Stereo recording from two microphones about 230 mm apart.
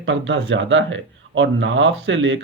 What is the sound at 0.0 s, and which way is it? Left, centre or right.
Speech, right.